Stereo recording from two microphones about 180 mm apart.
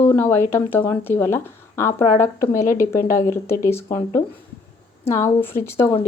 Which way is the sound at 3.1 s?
15° left (ahead or behind).